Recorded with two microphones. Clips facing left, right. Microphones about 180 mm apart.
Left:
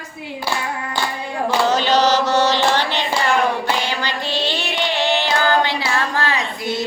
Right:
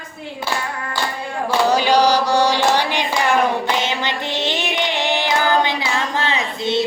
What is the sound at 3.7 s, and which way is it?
Female singing, 20° right (ahead or behind).